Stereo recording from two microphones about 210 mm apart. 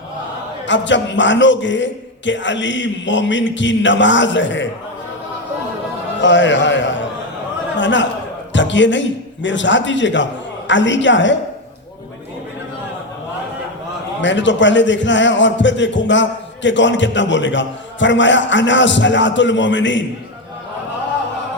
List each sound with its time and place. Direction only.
0.7 s a man's voice: 60° left (ahead or behind)
6.2 s a man's voice: 60° left (ahead or behind)
14.2 s a man's voice: 60° left (ahead or behind)